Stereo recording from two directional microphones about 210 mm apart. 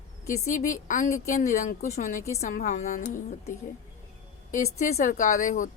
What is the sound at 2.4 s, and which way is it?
Speech, 35° left (ahead or behind).